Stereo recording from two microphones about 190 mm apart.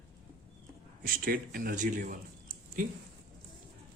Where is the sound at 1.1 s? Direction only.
50° right (ahead or behind).